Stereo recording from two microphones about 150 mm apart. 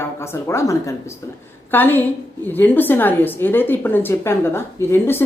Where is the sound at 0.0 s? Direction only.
15° left (ahead or behind).